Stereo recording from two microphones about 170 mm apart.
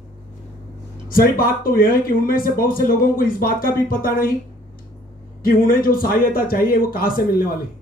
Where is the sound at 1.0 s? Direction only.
55° left (ahead or behind).